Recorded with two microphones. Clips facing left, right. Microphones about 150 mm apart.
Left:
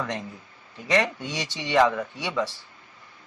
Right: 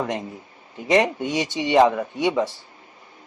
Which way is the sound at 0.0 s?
25° right (ahead or behind).